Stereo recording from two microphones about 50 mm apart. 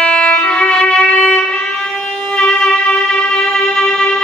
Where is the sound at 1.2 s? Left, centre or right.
Centre.